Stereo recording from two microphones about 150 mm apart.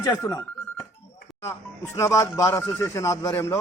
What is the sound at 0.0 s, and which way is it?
Speech, 20° left (ahead or behind).